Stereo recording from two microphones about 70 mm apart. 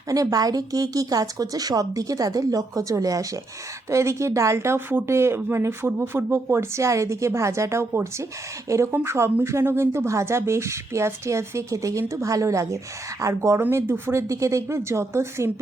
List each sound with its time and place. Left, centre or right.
0.1 s a woman's voice: right
13.6 s speech: right